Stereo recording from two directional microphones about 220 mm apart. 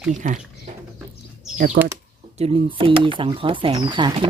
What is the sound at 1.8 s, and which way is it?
Speech, 40° right (ahead or behind).